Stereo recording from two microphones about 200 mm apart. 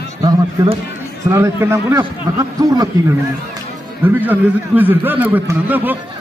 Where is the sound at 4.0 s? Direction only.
10° right (ahead or behind).